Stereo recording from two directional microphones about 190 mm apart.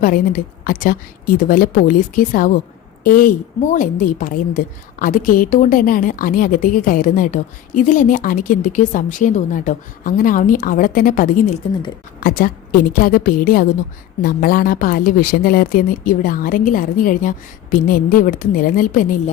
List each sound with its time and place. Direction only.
0.0 s a woman's voice: 45° left (ahead or behind)